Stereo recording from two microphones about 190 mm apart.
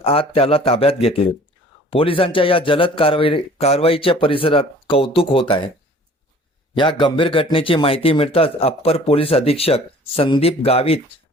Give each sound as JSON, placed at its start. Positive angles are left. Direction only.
{"t": 0.0, "sound": "a man's voice", "side_deg": 30}
{"t": 6.7, "sound": "speech", "side_deg": 25}